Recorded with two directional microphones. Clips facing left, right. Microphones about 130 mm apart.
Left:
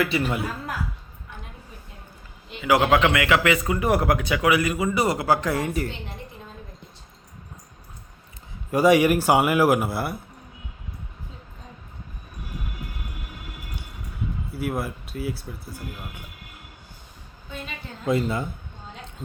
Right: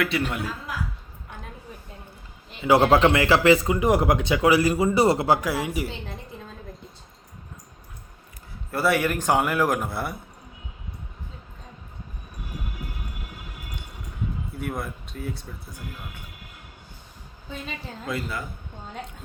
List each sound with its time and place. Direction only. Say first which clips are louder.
0.0 s speech: left 2 dB; centre (ahead or behind)
2.6 s speech: right 2 dB; 30° right (ahead or behind)
5.4 s speech: left 1 dB; 5° right (ahead or behind)
8.7 s a man's voice: left 6 dB; 15° left (ahead or behind)
14.5 s speech: left 7 dB; 5° left (ahead or behind)
18.0 s speech: left 8 dB; 25° left (ahead or behind)